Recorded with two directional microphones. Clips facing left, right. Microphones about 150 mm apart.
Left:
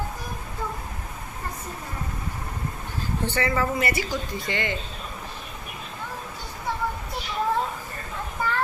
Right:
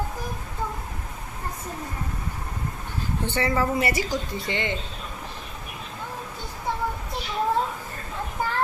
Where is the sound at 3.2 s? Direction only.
25° right (ahead or behind).